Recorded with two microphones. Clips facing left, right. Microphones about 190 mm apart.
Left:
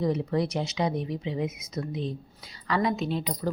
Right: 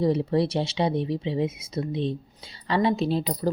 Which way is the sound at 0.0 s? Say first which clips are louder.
Right 4 dB; 30° right (ahead or behind).